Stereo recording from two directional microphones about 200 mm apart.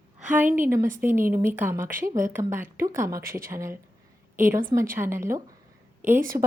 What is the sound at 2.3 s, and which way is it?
Speech, 10° right (ahead or behind).